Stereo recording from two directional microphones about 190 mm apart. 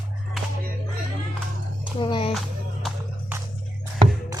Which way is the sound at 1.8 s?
25° left (ahead or behind).